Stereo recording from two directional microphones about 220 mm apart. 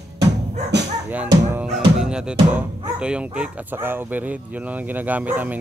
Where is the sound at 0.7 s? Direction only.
50° right (ahead or behind).